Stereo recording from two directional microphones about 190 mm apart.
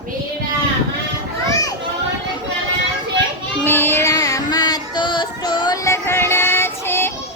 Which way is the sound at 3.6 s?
10° left (ahead or behind).